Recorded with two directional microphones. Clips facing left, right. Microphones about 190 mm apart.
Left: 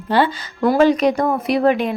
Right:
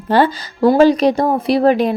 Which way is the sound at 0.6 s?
30° right (ahead or behind).